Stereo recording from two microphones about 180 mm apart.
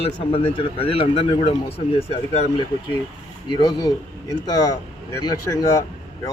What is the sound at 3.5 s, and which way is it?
Speech, 20° left (ahead or behind).